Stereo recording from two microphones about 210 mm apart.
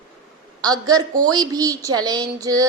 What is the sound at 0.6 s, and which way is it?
A woman's voice, 20° right (ahead or behind).